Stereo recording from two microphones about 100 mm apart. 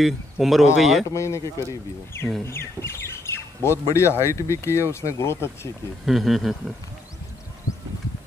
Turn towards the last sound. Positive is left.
turn(degrees=0)  # may be behind; listen again after turning